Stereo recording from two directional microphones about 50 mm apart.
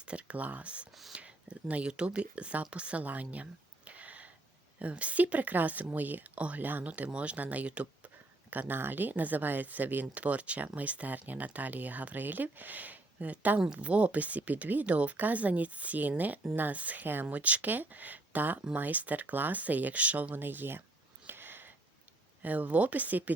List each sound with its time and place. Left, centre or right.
0.0 s speech: right
20.3 s speech: right
21.2 s a sound: right
22.4 s speech: right